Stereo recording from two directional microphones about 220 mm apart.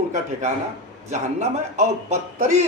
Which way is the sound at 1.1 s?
30° right (ahead or behind).